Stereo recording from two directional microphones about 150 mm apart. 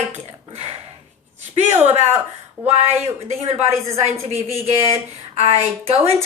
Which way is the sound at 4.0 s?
50° right (ahead or behind).